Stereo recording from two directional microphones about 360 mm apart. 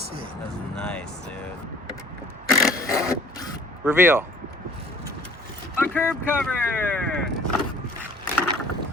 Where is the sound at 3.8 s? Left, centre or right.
Centre.